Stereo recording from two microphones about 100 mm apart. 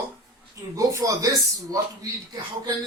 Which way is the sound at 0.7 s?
35° right (ahead or behind).